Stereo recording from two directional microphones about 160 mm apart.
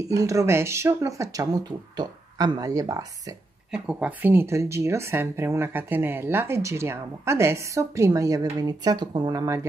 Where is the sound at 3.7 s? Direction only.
5° right (ahead or behind).